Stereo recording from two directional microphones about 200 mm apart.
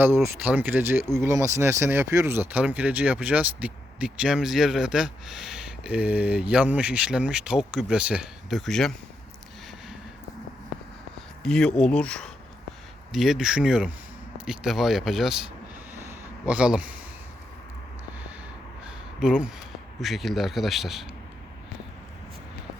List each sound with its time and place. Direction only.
0.0 s speech: 10° right (ahead or behind)
11.4 s speech: 5° left (ahead or behind)
16.5 s speech: 5° right (ahead or behind)
19.2 s speech: 5° right (ahead or behind)